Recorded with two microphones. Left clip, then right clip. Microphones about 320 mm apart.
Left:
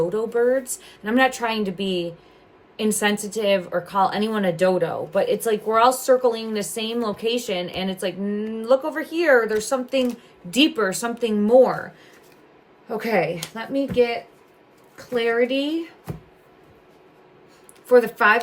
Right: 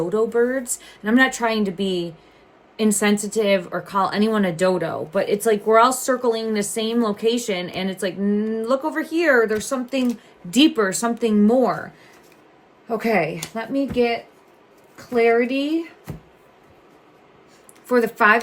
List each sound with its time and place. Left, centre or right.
0.1 s a woman's voice: centre
12.9 s a woman's voice: centre
17.8 s a woman's voice: centre